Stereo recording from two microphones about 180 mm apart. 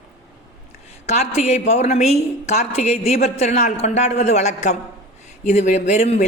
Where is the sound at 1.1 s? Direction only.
35° left (ahead or behind).